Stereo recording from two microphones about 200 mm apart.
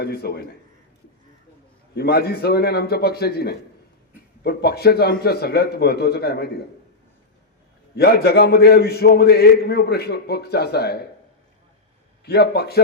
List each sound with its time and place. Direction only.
0.0 s a man's voice: 50° left (ahead or behind)
2.0 s a man's voice: 50° left (ahead or behind)
7.9 s a man's voice: 50° left (ahead or behind)
12.2 s a man's voice: 50° left (ahead or behind)